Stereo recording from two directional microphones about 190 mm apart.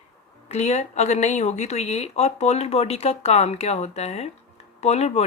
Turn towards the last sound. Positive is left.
turn(degrees=35)  # may be behind; listen again after turning